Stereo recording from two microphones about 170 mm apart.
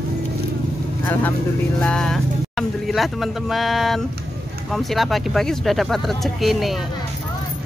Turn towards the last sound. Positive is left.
turn(degrees=0)  # may be behind; listen again after turning